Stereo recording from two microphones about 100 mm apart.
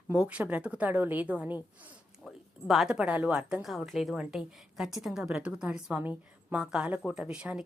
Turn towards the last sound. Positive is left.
turn(degrees=-10)  # may be behind; listen again after turning